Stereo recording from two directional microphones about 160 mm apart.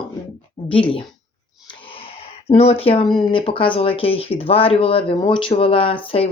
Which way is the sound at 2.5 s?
40° left (ahead or behind).